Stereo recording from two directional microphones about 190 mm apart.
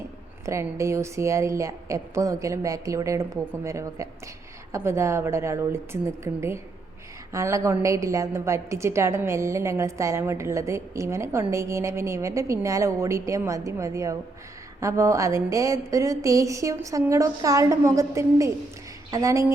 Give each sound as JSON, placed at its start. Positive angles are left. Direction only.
{"t": 0.4, "sound": "a woman's voice", "side_deg": -15}